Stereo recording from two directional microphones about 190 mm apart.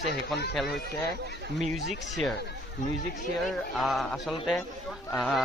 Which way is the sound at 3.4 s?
Centre (ahead or behind).